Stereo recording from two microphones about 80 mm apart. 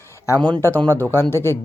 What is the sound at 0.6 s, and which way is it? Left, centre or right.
Speech, left.